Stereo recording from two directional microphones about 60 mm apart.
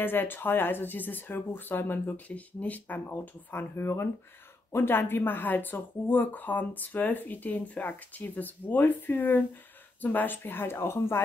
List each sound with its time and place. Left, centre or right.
0.0 s speech: left
2.1 s speech: left
3.5 s speech: left